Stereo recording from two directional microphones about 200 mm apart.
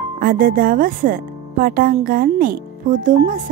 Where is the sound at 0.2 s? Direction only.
45° right (ahead or behind).